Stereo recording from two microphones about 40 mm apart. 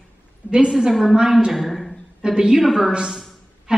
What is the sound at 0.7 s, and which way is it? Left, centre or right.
Speech, centre.